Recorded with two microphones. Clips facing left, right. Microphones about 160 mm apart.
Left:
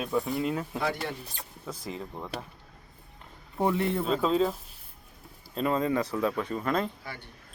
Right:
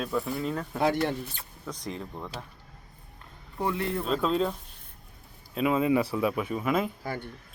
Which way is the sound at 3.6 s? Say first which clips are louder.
Left 3 dB; 25° left (ahead or behind).